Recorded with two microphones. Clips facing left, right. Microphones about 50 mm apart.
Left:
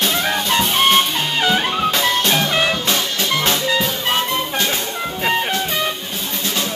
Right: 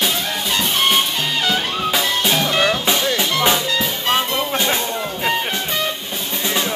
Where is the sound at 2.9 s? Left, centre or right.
Centre.